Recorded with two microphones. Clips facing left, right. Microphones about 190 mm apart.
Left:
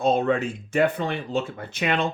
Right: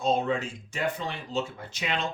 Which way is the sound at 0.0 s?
60° left (ahead or behind).